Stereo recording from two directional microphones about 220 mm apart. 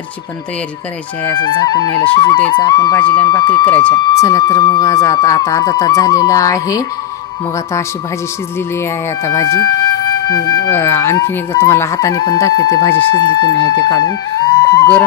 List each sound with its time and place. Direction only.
1.3 s speech: 20° left (ahead or behind)
9.2 s speech: 15° left (ahead or behind)